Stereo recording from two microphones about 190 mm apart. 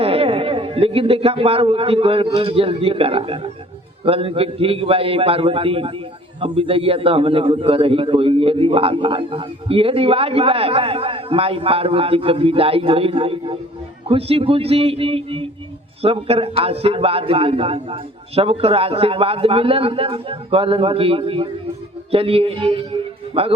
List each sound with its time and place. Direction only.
0.0 s a man's voice: 30° right (ahead or behind)